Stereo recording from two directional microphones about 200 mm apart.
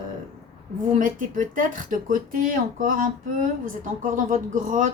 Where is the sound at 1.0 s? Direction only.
40° right (ahead or behind).